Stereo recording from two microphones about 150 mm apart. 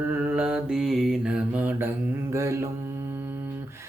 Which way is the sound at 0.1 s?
15° right (ahead or behind).